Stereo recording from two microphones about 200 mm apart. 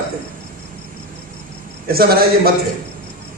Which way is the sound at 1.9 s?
50° right (ahead or behind).